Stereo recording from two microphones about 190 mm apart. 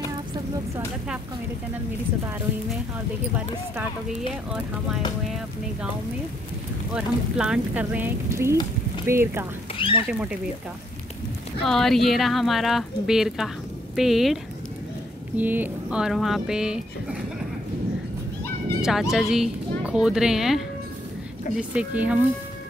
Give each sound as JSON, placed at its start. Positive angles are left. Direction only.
{"t": 4.3, "sound": "speech", "side_deg": -5}
{"t": 6.9, "sound": "speech", "side_deg": -5}
{"t": 9.8, "sound": "speech", "side_deg": 25}
{"t": 11.6, "sound": "speech", "side_deg": 0}
{"t": 18.8, "sound": "speech", "side_deg": 0}